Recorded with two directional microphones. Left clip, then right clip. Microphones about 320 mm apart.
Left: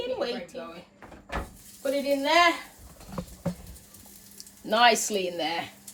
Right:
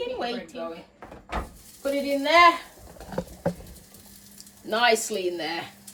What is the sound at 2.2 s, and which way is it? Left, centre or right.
Speech, centre.